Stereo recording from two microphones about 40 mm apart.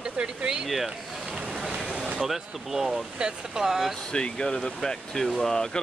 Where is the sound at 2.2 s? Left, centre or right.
Centre.